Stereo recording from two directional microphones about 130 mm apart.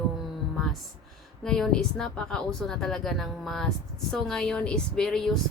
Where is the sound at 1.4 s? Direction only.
5° left (ahead or behind).